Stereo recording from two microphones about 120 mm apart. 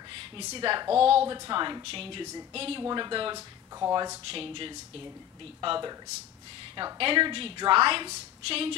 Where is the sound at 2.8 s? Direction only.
40° right (ahead or behind).